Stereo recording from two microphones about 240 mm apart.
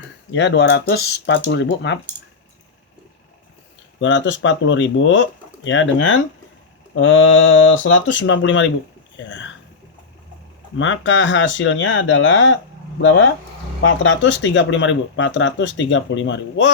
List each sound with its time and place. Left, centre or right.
0.3 s speech: left
4.0 s speech: left
10.8 s speech: left